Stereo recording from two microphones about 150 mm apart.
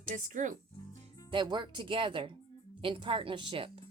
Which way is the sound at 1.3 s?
30° right (ahead or behind).